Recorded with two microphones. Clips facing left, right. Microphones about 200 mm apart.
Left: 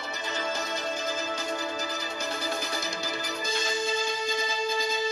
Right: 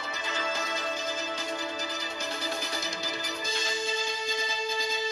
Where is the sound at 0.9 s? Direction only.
45° left (ahead or behind).